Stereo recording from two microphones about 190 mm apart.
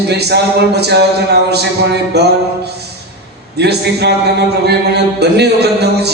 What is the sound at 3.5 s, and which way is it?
Music, 60° right (ahead or behind).